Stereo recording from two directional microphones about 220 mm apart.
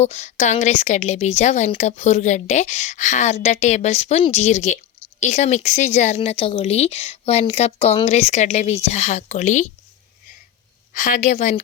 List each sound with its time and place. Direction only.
0.0 s a woman's voice: 30° left (ahead or behind)
10.9 s a woman's voice: 35° left (ahead or behind)